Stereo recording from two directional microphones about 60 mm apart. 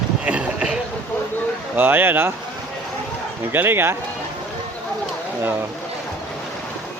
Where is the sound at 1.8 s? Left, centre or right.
Right.